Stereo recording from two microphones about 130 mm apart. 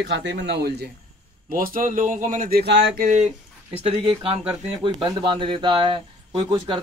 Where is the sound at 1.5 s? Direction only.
90° right.